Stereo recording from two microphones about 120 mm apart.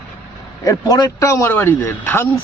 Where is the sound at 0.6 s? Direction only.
30° left (ahead or behind).